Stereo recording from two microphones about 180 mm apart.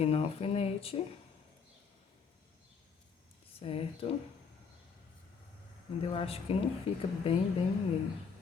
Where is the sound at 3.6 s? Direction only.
30° left (ahead or behind).